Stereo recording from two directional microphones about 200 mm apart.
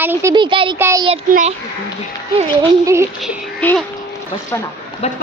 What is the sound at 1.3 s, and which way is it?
Speech, 40° right (ahead or behind).